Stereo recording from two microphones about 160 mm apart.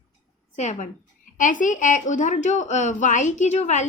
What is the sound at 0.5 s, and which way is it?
A woman's voice, 45° left (ahead or behind).